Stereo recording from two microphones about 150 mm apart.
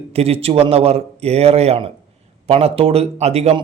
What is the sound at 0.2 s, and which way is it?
A man's voice, 40° right (ahead or behind).